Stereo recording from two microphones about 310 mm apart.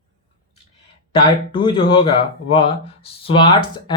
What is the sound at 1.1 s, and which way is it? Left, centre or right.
Speech, centre.